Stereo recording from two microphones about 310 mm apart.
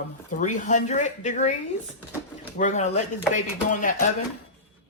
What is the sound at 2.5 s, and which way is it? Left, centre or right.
Speech, left.